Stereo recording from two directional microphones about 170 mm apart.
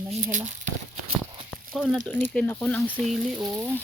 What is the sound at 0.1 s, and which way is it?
Speech, 50° right (ahead or behind).